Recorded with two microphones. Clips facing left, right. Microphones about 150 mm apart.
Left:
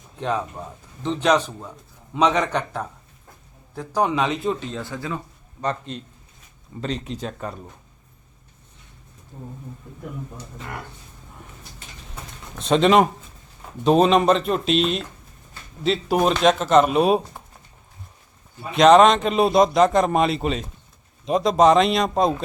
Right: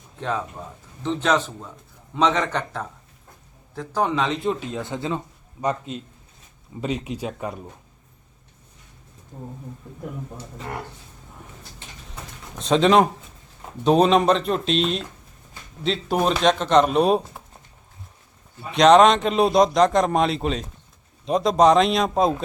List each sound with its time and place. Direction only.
0.2 s a man's voice: 15° left (ahead or behind)
4.7 s speech: 20° right (ahead or behind)
5.5 s speech: 10° right (ahead or behind)
12.5 s speech: centre (ahead or behind)
18.7 s speech: centre (ahead or behind)